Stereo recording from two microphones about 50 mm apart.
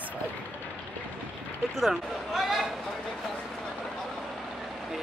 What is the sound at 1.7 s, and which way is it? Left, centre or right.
Speech, centre.